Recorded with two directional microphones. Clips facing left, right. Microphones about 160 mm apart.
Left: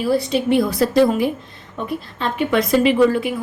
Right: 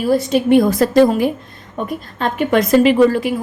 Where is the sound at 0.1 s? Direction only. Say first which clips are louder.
Right 5 dB; 45° right (ahead or behind).